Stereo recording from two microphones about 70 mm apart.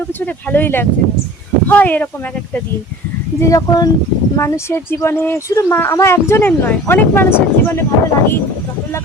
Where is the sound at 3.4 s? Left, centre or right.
Left.